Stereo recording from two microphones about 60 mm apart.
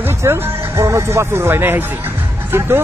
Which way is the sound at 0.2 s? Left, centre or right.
Right.